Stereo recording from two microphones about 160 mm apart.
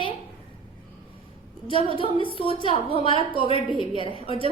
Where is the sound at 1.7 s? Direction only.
35° left (ahead or behind).